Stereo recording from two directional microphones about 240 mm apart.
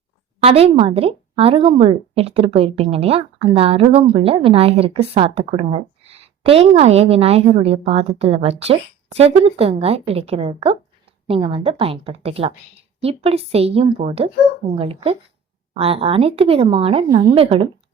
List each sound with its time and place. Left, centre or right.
0.3 s speech: right